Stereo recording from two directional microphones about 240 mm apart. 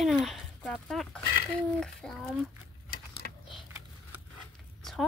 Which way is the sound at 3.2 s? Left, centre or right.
Left.